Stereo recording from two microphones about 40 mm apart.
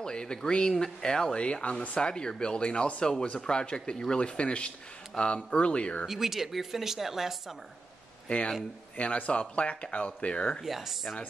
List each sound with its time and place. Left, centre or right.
0.0 s speech: centre
1.4 s speech: left
4.2 s speech: left
6.0 s speech: centre
8.3 s speech: left
10.6 s speech: centre